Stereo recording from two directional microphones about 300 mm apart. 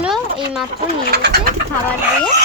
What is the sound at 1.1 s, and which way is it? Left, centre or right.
Speech, right.